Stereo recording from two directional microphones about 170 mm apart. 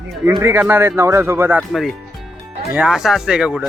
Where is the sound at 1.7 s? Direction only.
Centre (ahead or behind).